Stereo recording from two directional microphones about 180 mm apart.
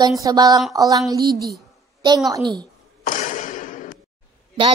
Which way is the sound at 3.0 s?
45° left (ahead or behind).